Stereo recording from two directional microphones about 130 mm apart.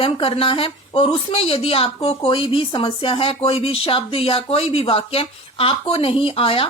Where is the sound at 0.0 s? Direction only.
45° left (ahead or behind).